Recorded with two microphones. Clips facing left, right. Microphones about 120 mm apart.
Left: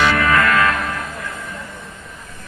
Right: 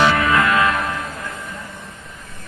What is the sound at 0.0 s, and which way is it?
Music, 20° right (ahead or behind).